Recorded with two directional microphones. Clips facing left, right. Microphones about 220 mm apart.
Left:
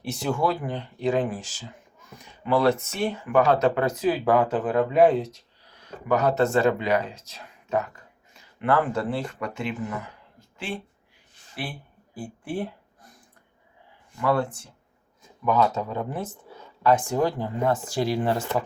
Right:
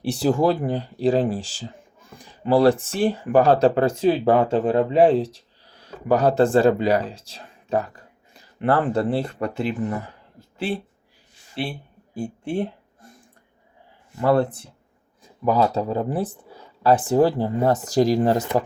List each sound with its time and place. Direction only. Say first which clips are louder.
0.0 s speech: right 6 dB; 35° right (ahead or behind)
11.6 s speech: right 6 dB; 30° right (ahead or behind)
14.2 s speech: right 5 dB; 40° right (ahead or behind)